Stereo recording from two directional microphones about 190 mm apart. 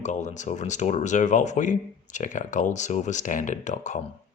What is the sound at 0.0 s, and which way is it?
Speech, 40° left (ahead or behind).